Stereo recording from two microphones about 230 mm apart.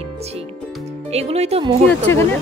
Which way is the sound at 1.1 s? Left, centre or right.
Right.